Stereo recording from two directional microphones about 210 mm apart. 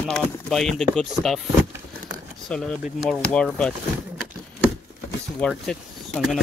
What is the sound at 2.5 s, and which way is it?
Speech, centre (ahead or behind).